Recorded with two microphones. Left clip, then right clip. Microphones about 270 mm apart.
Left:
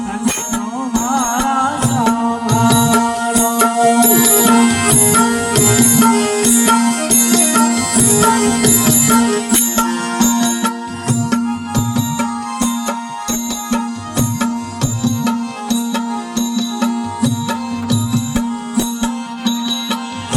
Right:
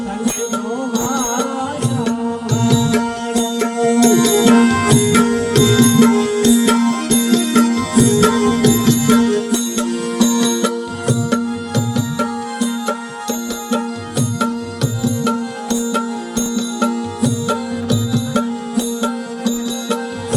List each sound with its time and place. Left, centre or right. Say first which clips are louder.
1.1 s music: left 8 dB; centre
16.6 s music: right 1 dB; centre